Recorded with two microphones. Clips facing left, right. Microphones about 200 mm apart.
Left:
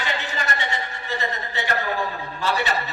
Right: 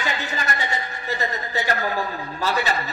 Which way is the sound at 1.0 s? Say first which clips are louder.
Right 2 dB; 40° right (ahead or behind).